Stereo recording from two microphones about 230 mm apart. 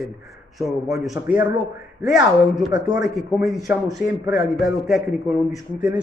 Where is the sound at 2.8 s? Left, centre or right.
Centre.